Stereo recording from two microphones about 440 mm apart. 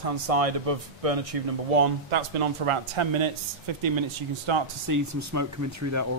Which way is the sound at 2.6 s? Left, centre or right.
Right.